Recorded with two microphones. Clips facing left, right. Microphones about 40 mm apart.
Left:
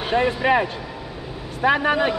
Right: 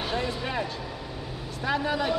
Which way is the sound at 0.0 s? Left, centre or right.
Left.